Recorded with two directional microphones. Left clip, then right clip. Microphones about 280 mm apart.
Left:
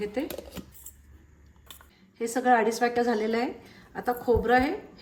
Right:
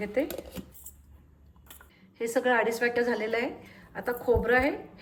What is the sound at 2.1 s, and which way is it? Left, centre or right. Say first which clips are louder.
A woman's voice: left 2 dB; centre.